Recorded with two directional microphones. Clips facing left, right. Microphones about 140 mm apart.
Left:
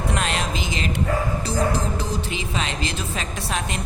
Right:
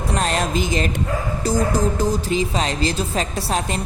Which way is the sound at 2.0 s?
40° right (ahead or behind).